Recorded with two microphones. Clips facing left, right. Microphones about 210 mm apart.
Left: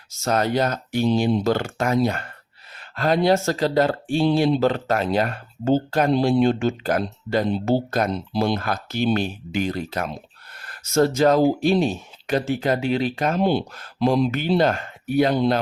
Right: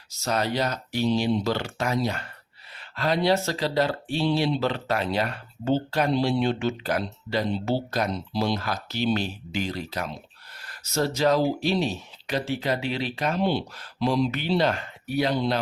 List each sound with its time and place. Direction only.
0.1 s speech: 50° left (ahead or behind)